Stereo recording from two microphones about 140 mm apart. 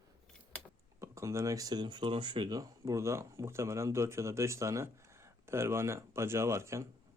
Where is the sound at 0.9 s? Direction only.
20° right (ahead or behind).